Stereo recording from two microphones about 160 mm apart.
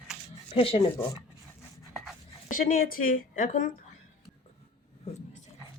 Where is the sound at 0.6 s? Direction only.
35° left (ahead or behind).